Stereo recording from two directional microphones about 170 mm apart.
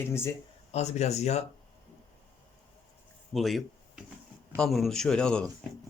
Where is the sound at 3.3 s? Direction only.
Centre (ahead or behind).